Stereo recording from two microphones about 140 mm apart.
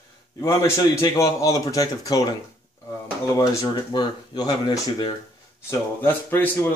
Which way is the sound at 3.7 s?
30° left (ahead or behind).